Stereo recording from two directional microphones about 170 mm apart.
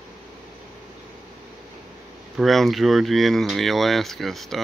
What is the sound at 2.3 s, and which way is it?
Speech, centre (ahead or behind).